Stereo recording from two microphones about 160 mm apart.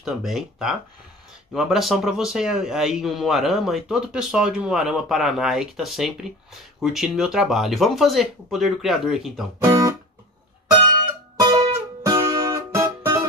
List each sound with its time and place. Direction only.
0.0 s a man's voice: centre (ahead or behind)
9.6 s speech: 20° right (ahead or behind)
11.4 s music: 20° right (ahead or behind)